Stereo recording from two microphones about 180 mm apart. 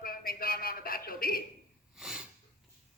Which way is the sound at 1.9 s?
5° right (ahead or behind).